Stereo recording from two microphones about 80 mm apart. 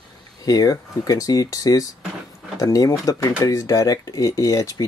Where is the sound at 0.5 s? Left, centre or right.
Left.